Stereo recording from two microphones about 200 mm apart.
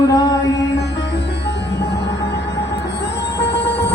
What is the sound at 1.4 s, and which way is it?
Music, 60° left (ahead or behind).